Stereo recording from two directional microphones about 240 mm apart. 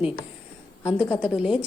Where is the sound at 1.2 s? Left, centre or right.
Centre.